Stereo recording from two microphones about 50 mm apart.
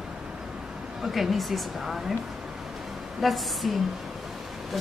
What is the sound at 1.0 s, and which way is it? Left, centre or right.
Speech, centre.